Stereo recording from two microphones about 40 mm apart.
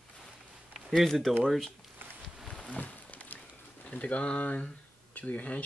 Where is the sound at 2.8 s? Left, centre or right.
Left.